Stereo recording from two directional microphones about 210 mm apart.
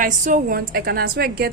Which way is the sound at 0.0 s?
40° right (ahead or behind).